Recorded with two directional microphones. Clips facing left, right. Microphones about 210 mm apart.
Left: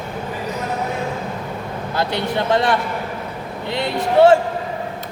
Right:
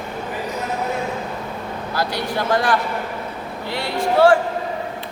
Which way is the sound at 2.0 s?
25° left (ahead or behind).